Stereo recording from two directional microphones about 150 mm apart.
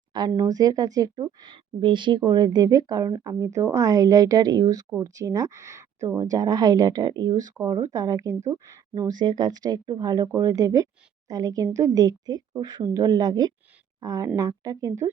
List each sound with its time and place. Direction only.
0.4 s speech: 25° right (ahead or behind)